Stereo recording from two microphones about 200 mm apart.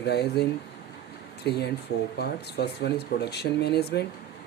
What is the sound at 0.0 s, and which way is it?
Speech, 55° left (ahead or behind).